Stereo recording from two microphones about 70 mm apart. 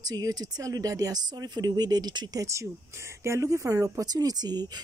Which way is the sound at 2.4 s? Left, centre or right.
Right.